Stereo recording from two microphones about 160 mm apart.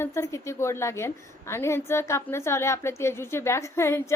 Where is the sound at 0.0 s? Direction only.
15° left (ahead or behind).